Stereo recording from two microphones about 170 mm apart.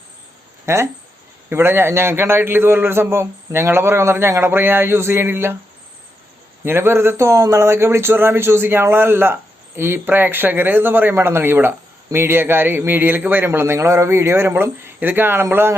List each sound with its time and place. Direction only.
0.6 s speech: 15° right (ahead or behind)
6.7 s speech: 15° right (ahead or behind)